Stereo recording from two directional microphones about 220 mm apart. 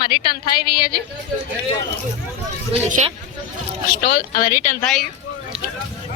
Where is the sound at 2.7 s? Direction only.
25° right (ahead or behind).